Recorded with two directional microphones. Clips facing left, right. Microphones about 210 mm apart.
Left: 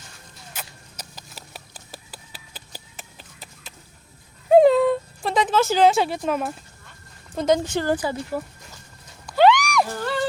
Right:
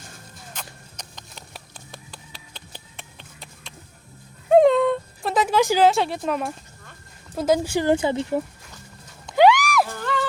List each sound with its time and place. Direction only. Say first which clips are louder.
0.5 s a sound: left 1 dB; 5° left (ahead or behind)
5.5 s speech: right 2 dB; 15° right (ahead or behind)
5.8 s speech: left 1 dB; centre (ahead or behind)
7.9 s speech: right 4 dB; 25° right (ahead or behind)
9.2 s a sound: right 1 dB; 15° right (ahead or behind)
9.9 s toothbrush: left 1 dB; 35° left (ahead or behind)